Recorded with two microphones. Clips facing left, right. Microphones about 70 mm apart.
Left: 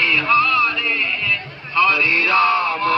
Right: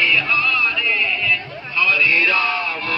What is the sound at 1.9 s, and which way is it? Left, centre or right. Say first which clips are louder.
Chant: left 1 dB; left.